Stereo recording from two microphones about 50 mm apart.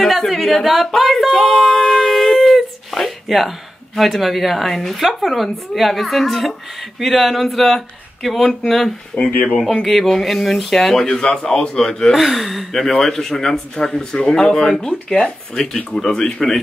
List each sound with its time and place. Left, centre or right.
0.3 s speech: centre
1.5 s a sound: centre
2.1 s speech: centre
9.1 s speech: left
9.8 s speech: centre
11.1 s speech: centre
12.1 s speech: centre